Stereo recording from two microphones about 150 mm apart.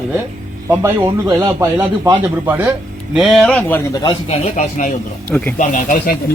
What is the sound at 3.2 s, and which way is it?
Speech, centre (ahead or behind).